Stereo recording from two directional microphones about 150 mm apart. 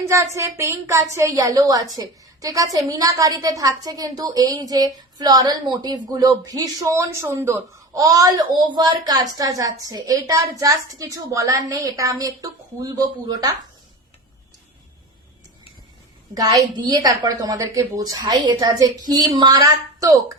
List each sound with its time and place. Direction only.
0.0 s a woman's voice: 20° right (ahead or behind)
16.3 s a woman's voice: 25° right (ahead or behind)